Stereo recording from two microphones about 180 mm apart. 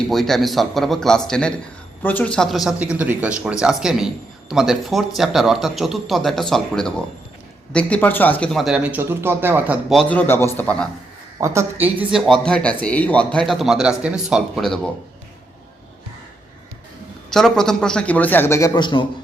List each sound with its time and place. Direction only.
0.1 s speech: centre (ahead or behind)
9.9 s a man's voice: 5° left (ahead or behind)
11.3 s a woman's voice: 15° right (ahead or behind)
12.2 s speech: 5° left (ahead or behind)
17.3 s a man's voice: 5° left (ahead or behind); by 19.0 s 25° left (ahead or behind)